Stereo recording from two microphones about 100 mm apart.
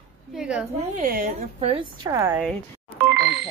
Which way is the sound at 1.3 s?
90° right.